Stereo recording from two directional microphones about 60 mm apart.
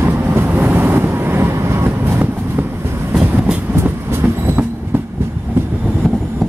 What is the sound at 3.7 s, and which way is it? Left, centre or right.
Train, right.